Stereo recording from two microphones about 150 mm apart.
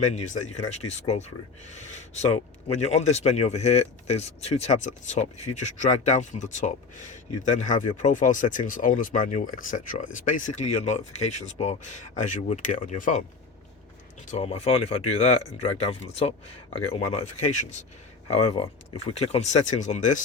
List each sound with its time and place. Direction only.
0.0 s speech: 50° left (ahead or behind)
14.3 s speech: 45° left (ahead or behind)